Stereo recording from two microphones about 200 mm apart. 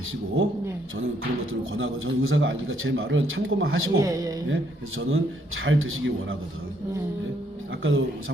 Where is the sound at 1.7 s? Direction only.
85° right.